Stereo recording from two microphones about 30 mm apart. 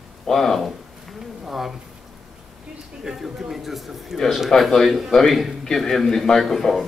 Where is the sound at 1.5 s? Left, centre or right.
Centre.